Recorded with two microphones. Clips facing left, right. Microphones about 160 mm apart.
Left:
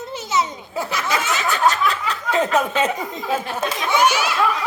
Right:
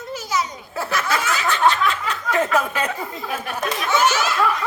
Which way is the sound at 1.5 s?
40° left (ahead or behind).